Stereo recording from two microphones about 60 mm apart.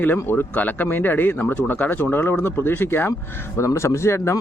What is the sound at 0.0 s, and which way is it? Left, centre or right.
Speech, left.